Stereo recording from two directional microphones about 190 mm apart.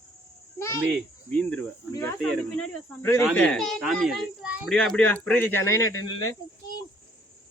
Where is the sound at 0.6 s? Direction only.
15° left (ahead or behind).